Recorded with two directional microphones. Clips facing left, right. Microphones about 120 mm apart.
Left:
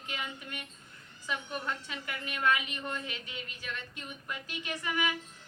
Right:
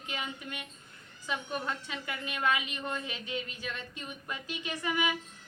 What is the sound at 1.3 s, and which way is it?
A woman's voice, 20° right (ahead or behind).